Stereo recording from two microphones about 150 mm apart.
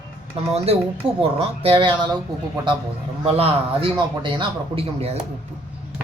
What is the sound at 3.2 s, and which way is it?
A man's voice, 40° right (ahead or behind).